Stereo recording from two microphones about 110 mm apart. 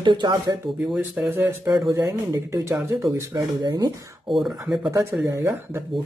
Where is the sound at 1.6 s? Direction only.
35° right (ahead or behind).